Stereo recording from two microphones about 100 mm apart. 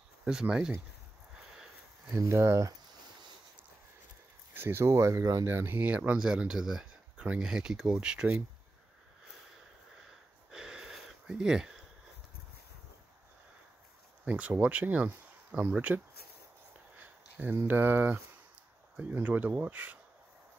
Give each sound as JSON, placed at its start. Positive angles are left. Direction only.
{"t": 0.2, "sound": "speech", "side_deg": -10}
{"t": 1.5, "sound": "a sound", "side_deg": -5}
{"t": 2.1, "sound": "speech", "side_deg": -30}
{"t": 4.6, "sound": "speech", "side_deg": -25}
{"t": 10.5, "sound": "a sound", "side_deg": -5}
{"t": 14.2, "sound": "speech", "side_deg": -15}
{"t": 17.0, "sound": "speech", "side_deg": -15}